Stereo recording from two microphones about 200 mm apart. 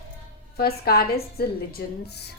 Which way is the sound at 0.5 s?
50° left (ahead or behind).